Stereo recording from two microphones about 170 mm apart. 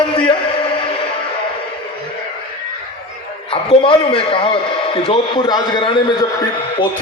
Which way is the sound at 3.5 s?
30° left (ahead or behind).